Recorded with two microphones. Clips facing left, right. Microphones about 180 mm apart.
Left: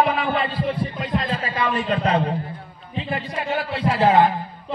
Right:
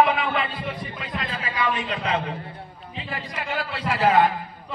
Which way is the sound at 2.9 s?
30° left (ahead or behind).